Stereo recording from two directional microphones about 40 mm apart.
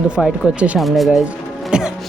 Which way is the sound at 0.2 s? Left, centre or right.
Right.